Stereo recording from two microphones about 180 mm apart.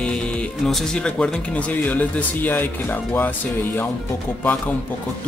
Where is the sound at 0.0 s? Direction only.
5° left (ahead or behind).